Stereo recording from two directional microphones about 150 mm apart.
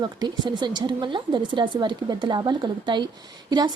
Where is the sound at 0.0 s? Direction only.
30° right (ahead or behind).